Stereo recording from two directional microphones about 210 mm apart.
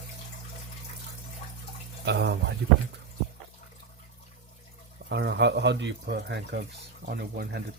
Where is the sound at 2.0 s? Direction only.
55° right (ahead or behind).